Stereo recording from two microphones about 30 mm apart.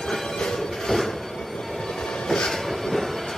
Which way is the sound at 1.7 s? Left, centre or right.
Centre.